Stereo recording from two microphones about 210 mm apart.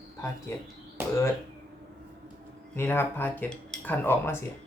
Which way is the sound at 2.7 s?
10° left (ahead or behind).